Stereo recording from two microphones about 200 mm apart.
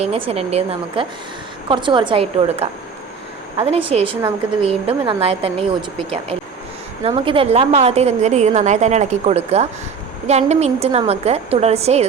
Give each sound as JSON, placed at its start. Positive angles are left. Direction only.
{"t": 0.0, "sound": "a woman's voice", "side_deg": -30}
{"t": 3.7, "sound": "a woman's voice", "side_deg": -30}
{"t": 7.0, "sound": "a woman's voice", "side_deg": -30}